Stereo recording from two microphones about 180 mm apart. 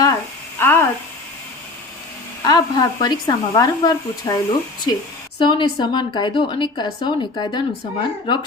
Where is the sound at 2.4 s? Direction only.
25° left (ahead or behind).